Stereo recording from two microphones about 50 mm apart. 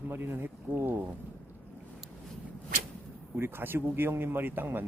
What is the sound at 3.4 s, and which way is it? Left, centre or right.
Speech, right.